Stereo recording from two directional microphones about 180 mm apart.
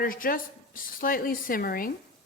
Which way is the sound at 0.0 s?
50° left (ahead or behind).